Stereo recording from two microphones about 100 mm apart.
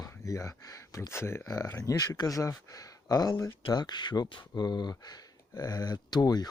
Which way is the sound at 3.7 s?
45° left (ahead or behind).